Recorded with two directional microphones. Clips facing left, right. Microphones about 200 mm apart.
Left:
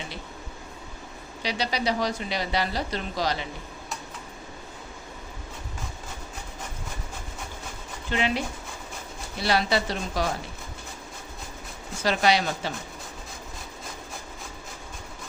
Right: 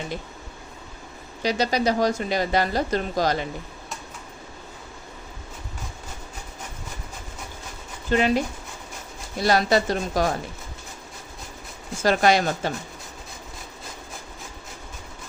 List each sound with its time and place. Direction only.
1.4 s speech: 45° right (ahead or behind)
8.1 s speech: 40° right (ahead or behind)
9.4 s speech: 45° right (ahead or behind)
12.0 s speech: 50° right (ahead or behind)